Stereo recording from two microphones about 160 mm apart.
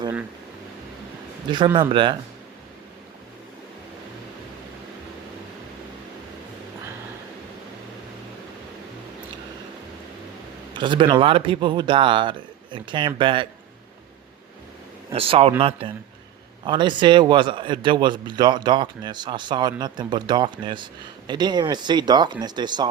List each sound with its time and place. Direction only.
1.5 s a man's voice: 30° right (ahead or behind)
10.8 s a man's voice: 30° right (ahead or behind)
15.1 s a man's voice: 35° right (ahead or behind)